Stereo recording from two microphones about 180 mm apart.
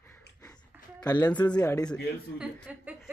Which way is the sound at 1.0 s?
20° left (ahead or behind).